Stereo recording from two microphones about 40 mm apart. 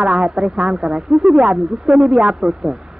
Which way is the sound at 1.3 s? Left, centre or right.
Centre.